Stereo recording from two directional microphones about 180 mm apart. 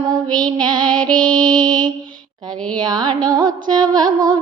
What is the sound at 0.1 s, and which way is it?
Mantra, 25° right (ahead or behind).